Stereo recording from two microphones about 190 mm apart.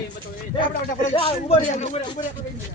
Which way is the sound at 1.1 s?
30° left (ahead or behind).